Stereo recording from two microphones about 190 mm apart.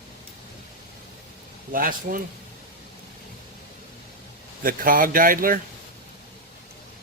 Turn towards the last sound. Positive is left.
turn(degrees=-45)  # may be behind; listen again after turning